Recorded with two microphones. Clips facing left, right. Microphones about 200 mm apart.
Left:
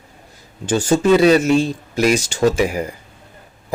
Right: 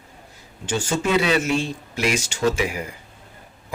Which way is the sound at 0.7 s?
40° left (ahead or behind).